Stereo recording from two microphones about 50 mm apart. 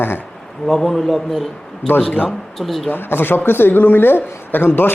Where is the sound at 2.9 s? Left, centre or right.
Left.